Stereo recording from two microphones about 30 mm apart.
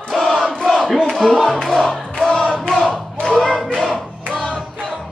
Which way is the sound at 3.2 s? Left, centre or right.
Left.